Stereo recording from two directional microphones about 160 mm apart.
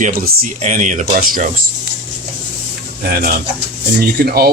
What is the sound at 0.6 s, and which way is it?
Speech, 50° right (ahead or behind).